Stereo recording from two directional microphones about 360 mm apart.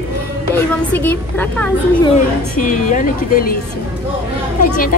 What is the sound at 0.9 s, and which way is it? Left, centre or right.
A woman's voice, centre.